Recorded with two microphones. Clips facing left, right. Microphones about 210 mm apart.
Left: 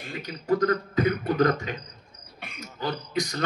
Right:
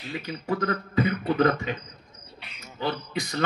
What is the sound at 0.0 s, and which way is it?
A man's voice, 45° left (ahead or behind).